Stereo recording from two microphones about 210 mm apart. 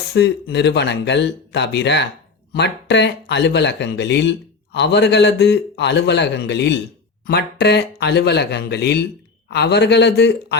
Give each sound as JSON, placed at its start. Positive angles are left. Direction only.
{"t": 0.1, "sound": "speech", "side_deg": 55}